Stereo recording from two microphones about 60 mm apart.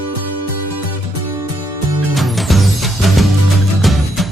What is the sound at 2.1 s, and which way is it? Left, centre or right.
Music, centre.